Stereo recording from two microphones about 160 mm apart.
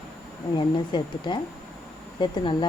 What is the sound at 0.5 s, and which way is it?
A woman's voice, 30° left (ahead or behind).